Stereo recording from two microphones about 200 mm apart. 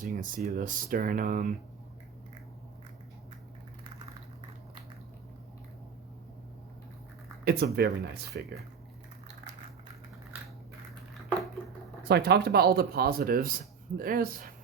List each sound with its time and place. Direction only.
0.0 s speech: 40° right (ahead or behind)
7.4 s speech: 50° right (ahead or behind)
12.0 s speech: 55° right (ahead or behind)